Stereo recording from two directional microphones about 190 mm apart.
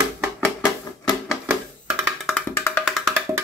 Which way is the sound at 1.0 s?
5° right (ahead or behind).